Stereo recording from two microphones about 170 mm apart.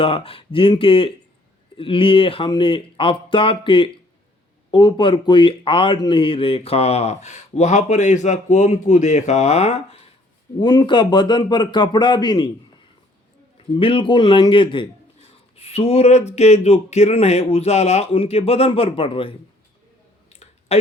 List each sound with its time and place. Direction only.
0.0 s speech: 35° left (ahead or behind)
10.6 s a man's voice: 25° left (ahead or behind)
13.7 s a man's voice: 30° left (ahead or behind)
20.3 s clicking: 40° left (ahead or behind)